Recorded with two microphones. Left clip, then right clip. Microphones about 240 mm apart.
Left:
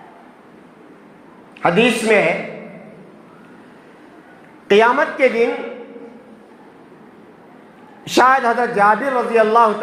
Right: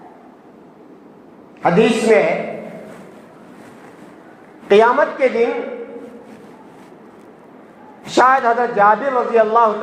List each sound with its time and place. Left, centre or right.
1.6 s a man's voice: left
4.7 s a man's voice: left
8.1 s a man's voice: left